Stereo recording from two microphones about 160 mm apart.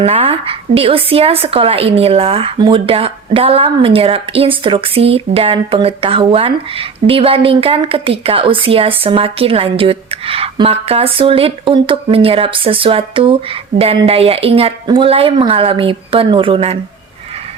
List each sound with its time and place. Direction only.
0.0 s a woman's voice: 35° right (ahead or behind)